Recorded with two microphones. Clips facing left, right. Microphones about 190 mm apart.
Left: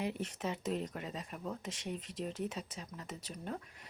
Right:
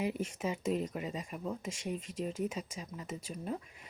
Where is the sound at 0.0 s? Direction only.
10° right (ahead or behind).